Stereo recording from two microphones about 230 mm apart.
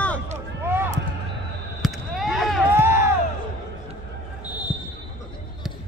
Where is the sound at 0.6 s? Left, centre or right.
Centre.